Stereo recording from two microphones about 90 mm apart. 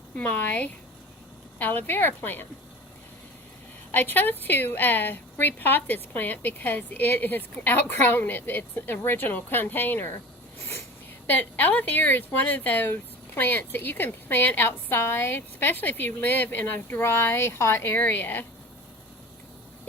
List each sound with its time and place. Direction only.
0.2 s speech: 20° left (ahead or behind)
3.9 s speech: 20° left (ahead or behind)
11.3 s speech: 20° left (ahead or behind)